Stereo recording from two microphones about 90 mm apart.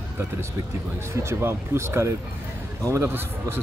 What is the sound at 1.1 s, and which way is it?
A man's voice, 30° right (ahead or behind).